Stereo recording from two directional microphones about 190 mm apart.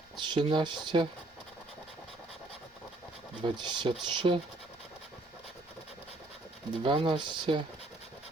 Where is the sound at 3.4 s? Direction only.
25° right (ahead or behind).